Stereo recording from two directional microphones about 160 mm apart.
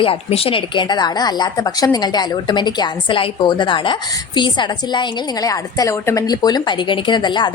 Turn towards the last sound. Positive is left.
turn(degrees=30)  # may be behind; listen again after turning